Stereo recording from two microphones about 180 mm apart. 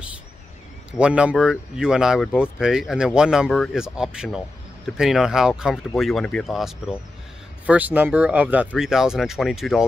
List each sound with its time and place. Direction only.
0.9 s speech: 5° right (ahead or behind)